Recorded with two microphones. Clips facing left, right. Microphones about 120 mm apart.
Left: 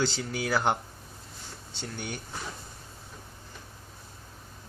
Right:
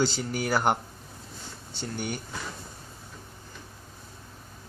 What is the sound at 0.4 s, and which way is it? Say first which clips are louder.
Speech: right 2 dB; 10° right (ahead or behind).